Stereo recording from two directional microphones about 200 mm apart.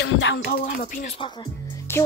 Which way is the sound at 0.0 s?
70° left (ahead or behind).